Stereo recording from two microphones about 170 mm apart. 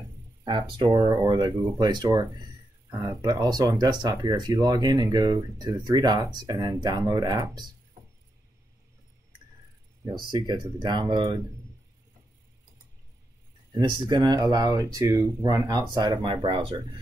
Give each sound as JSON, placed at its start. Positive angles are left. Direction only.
{"t": 0.4, "sound": "speech", "side_deg": -25}
{"t": 10.0, "sound": "speech", "side_deg": -25}
{"t": 13.7, "sound": "a sound", "side_deg": -25}
{"t": 14.0, "sound": "speech", "side_deg": -25}